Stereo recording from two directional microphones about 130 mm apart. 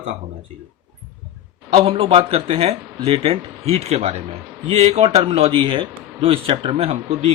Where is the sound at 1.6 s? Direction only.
50° right (ahead or behind).